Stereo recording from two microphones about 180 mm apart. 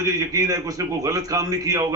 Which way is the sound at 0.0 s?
20° right (ahead or behind).